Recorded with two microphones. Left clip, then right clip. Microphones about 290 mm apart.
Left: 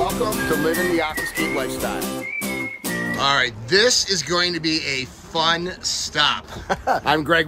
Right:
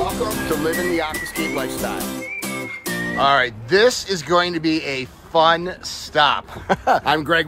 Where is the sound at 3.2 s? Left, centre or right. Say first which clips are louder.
Right 4 dB; centre.